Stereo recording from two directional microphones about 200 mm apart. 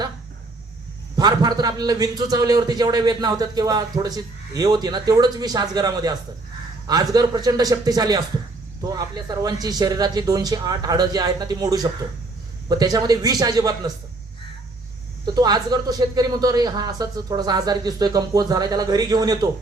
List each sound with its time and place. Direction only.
1.1 s a man's voice: 20° right (ahead or behind)
15.4 s a man's voice: 20° right (ahead or behind)